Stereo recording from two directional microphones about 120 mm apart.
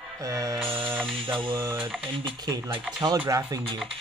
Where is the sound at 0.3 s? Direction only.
30° right (ahead or behind).